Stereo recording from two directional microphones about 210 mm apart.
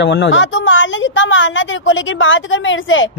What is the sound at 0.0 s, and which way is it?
A woman's voice, 55° left (ahead or behind).